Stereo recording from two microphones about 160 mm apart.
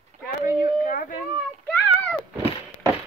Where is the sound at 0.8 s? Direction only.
55° left (ahead or behind).